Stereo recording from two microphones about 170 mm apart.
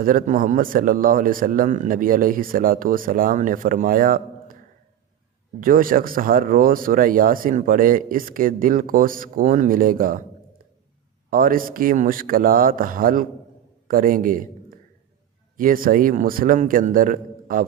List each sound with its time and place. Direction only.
0.0 s speech: 55° right (ahead or behind)
5.5 s speech: 55° right (ahead or behind)
11.3 s a man's voice: 55° right (ahead or behind)